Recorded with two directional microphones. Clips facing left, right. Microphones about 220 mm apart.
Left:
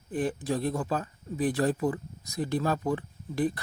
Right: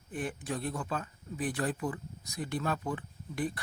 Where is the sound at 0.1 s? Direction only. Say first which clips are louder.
Left 7 dB; 35° left (ahead or behind).